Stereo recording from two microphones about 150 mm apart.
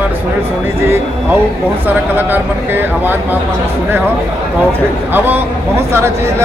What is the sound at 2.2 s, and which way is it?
Speech, 15° right (ahead or behind).